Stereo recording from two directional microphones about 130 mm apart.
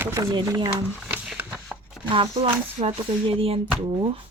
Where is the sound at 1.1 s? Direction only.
15° right (ahead or behind).